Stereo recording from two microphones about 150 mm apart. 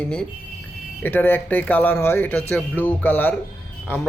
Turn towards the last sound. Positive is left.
turn(degrees=15)  # may be behind; listen again after turning